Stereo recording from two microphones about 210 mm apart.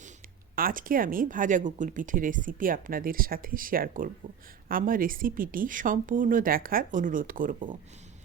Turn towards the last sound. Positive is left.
turn(degrees=-40)  # may be behind; listen again after turning